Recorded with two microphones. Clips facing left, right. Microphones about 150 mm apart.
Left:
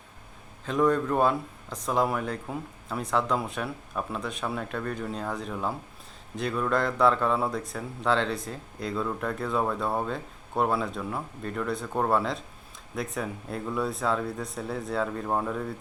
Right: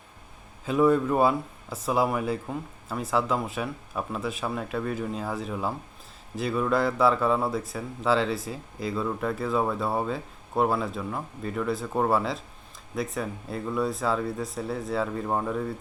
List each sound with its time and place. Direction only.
0.6 s speech: 5° right (ahead or behind)